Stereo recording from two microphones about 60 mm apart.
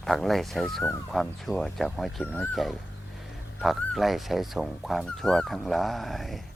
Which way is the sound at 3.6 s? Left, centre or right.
Centre.